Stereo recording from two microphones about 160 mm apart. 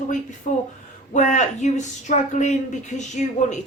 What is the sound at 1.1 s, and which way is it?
Speech, 50° left (ahead or behind).